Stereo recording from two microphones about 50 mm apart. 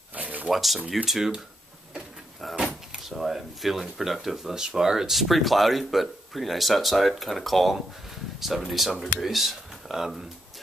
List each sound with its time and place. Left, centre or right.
0.1 s a sound: right
0.5 s speech: centre
2.5 s door: right
3.0 s speech: centre
5.2 s speech: centre